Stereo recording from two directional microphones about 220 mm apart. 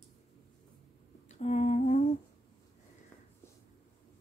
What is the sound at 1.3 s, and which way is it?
Humming, 30° left (ahead or behind).